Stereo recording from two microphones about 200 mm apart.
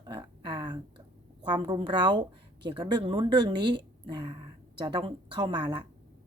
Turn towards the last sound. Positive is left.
turn(degrees=-20)  # may be behind; listen again after turning